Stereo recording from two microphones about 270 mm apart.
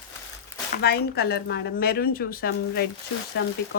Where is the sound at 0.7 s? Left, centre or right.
Left.